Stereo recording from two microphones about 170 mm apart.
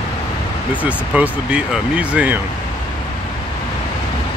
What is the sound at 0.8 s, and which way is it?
Speech, 10° right (ahead or behind).